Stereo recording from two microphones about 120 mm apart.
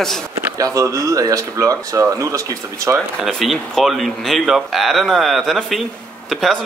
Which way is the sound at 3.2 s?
Centre (ahead or behind).